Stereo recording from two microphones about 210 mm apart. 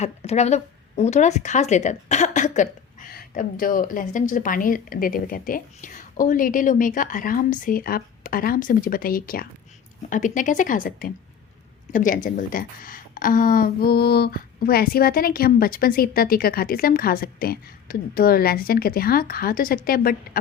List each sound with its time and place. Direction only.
0.0 s a woman's voice: 30° left (ahead or behind)